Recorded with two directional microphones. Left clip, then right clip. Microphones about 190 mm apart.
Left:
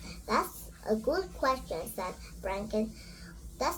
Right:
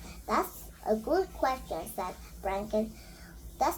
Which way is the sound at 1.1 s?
15° right (ahead or behind).